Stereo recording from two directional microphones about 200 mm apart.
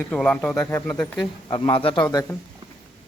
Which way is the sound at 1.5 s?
25° left (ahead or behind).